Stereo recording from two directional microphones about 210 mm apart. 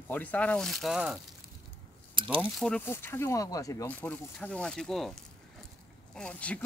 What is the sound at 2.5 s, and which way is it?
Speech, 5° left (ahead or behind).